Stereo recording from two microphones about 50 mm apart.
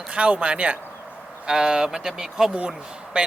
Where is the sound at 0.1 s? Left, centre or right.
Right.